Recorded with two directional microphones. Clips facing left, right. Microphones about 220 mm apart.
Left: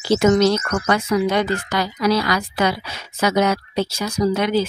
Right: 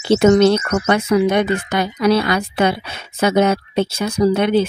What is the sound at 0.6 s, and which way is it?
A woman's voice, 25° right (ahead or behind).